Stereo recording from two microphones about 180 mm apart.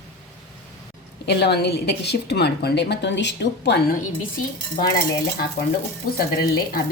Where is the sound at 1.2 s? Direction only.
65° left (ahead or behind).